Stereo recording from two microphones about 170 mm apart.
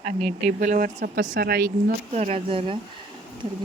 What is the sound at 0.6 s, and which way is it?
Speech, 50° right (ahead or behind).